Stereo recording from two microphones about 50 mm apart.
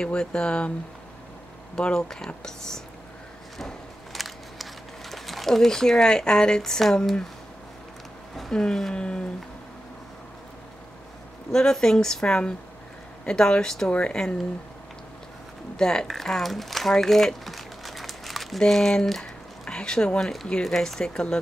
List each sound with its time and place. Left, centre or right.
0.0 s speech: centre
1.8 s speech: centre
4.1 s a sound: centre
5.1 s speech: centre
8.4 s speech: centre
11.5 s speech: centre
15.7 s speech: centre
16.1 s crumpling: centre
18.6 s speech: centre